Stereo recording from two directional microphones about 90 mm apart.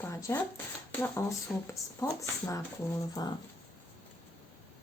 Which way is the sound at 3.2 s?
50° left (ahead or behind).